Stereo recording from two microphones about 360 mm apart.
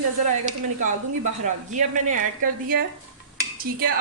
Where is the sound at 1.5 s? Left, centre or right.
Right.